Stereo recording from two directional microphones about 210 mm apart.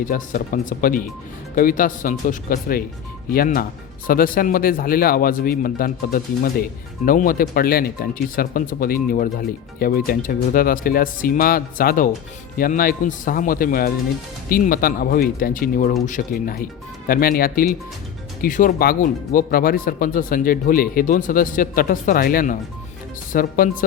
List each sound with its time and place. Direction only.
0.0 s speech: 45° left (ahead or behind)